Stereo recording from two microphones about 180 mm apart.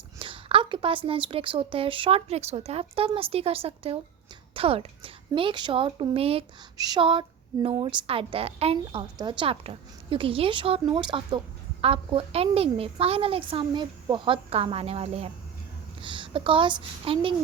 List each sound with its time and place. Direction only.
0.2 s a woman's voice: 30° right (ahead or behind)